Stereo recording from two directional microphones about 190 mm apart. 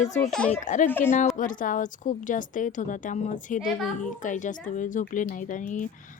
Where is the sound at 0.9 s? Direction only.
10° left (ahead or behind).